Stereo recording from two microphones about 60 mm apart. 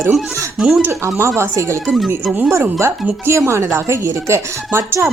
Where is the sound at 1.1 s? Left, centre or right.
Right.